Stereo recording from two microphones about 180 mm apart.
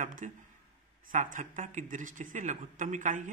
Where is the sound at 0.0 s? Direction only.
45° right (ahead or behind).